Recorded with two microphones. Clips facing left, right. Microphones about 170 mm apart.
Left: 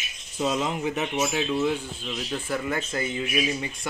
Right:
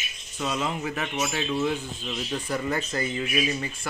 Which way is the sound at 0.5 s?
15° left (ahead or behind).